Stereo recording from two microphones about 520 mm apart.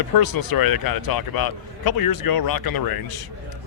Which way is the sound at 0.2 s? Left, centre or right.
Left.